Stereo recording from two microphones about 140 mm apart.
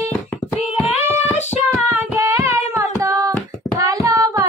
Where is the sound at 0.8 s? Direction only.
50° left (ahead or behind).